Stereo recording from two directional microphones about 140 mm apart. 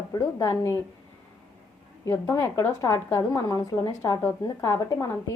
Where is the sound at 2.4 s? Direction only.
30° left (ahead or behind).